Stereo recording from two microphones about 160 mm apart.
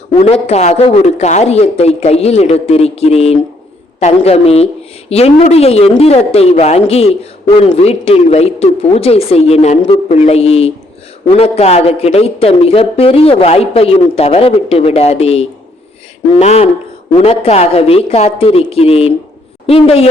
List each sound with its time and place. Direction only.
0.2 s speech: 40° left (ahead or behind)